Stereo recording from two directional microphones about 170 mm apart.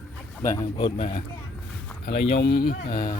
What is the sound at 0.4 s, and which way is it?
Speech, 15° left (ahead or behind).